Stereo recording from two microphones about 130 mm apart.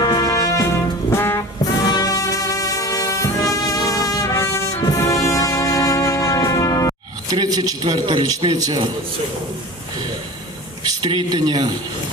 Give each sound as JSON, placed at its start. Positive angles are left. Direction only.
{"t": 0.0, "sound": "music", "side_deg": 25}
{"t": 1.1, "sound": "brass instrument", "side_deg": 20}
{"t": 1.8, "sound": "music", "side_deg": 30}
{"t": 7.3, "sound": "a man's voice", "side_deg": -30}
{"t": 11.0, "sound": "a man's voice", "side_deg": -30}